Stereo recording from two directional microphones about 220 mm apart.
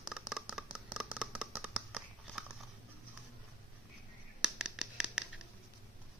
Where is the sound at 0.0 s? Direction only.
5° right (ahead or behind).